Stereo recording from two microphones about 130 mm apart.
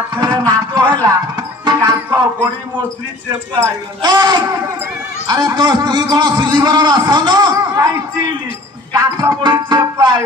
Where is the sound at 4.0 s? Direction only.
30° right (ahead or behind).